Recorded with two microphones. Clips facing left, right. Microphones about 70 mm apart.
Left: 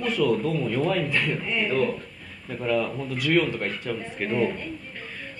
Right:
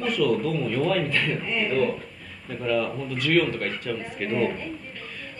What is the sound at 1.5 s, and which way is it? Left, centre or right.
Speech, centre.